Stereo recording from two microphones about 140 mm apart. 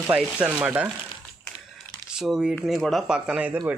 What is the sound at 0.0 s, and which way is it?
Speech, 10° right (ahead or behind).